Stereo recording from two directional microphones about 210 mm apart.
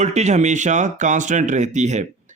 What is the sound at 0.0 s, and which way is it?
Speech, 30° right (ahead or behind).